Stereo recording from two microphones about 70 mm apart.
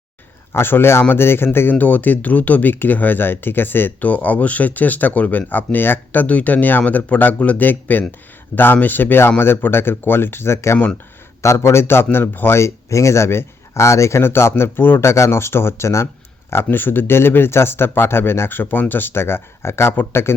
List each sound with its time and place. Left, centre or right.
0.5 s speech: left
15.1 s speech: left
16.7 s speech: left